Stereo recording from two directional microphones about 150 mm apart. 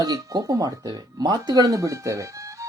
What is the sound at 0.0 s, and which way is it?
Speech, 25° right (ahead or behind).